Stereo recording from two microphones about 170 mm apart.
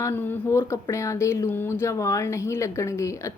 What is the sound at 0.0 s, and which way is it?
Speech, 10° left (ahead or behind).